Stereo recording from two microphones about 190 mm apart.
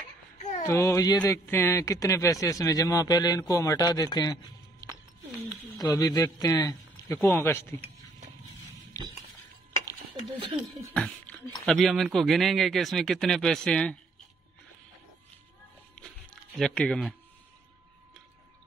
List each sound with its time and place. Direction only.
0.7 s a man's voice: 15° left (ahead or behind)
9.0 s chink: 15° left (ahead or behind)
10.5 s speech: centre (ahead or behind)
16.5 s speech: 5° left (ahead or behind)